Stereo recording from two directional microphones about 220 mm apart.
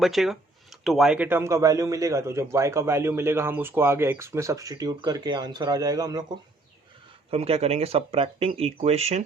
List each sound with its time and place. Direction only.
0.0 s speech: centre (ahead or behind); by 9.2 s 30° right (ahead or behind)